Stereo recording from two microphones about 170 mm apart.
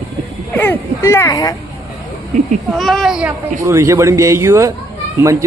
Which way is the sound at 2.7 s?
Centre (ahead or behind).